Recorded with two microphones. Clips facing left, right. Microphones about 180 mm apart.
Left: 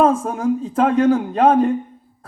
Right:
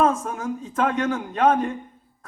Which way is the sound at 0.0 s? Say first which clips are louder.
Left 5 dB; 30° left (ahead or behind).